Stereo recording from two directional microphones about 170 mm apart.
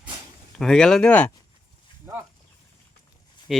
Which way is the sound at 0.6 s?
5° left (ahead or behind).